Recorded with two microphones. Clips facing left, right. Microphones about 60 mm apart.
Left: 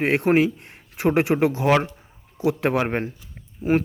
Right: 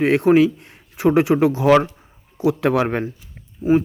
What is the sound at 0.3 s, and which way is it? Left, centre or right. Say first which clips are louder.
Speech: right 5 dB; left.